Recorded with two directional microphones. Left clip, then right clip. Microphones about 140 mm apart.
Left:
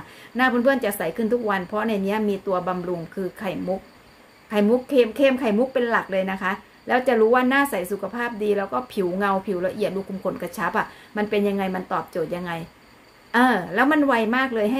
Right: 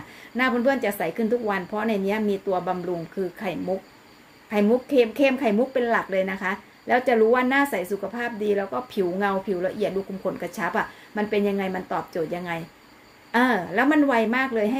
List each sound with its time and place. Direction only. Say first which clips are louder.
0.4 s speech: left 2 dB; 20° left (ahead or behind)